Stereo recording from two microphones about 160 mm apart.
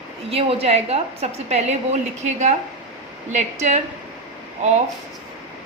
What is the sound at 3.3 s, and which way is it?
Speech, 50° right (ahead or behind).